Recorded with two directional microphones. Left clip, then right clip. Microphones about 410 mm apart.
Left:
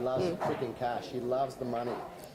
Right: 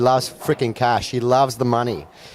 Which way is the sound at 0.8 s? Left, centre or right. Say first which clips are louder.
Right 15 dB; right.